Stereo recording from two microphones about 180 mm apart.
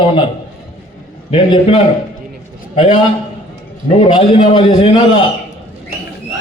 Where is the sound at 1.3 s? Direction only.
30° left (ahead or behind).